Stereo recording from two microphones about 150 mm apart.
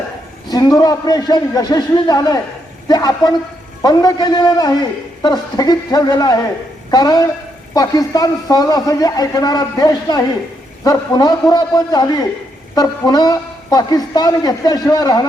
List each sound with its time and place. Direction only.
0.4 s a man's voice: 25° left (ahead or behind)